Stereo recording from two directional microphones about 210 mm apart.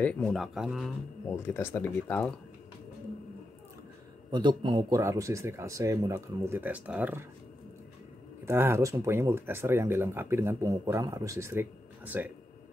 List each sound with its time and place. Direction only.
0.0 s speech: 5° left (ahead or behind)
1.3 s speech: 10° left (ahead or behind)
4.3 s speech: 20° right (ahead or behind)
8.5 s speech: 10° right (ahead or behind)